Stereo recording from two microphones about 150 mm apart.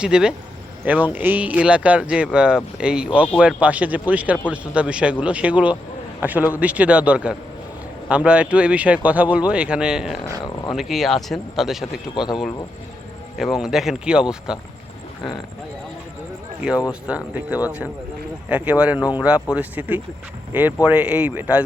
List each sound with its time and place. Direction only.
0.0 s a man's voice: 5° right (ahead or behind)
12.1 s a man's voice: 35° left (ahead or behind)
13.3 s speech: centre (ahead or behind)
16.6 s speech: 5° right (ahead or behind)